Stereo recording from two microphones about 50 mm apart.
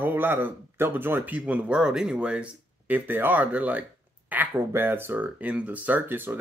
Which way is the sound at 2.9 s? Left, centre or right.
Right.